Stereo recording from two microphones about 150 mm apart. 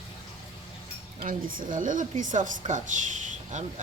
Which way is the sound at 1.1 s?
70° right (ahead or behind).